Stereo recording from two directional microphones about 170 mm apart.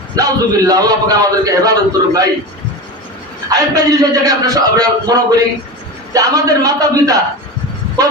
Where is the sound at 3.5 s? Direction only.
20° right (ahead or behind).